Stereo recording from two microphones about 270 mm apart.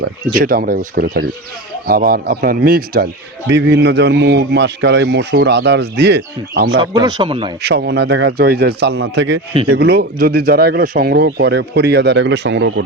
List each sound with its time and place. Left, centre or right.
0.3 s a man's voice: right
6.7 s speech: centre
7.6 s a man's voice: right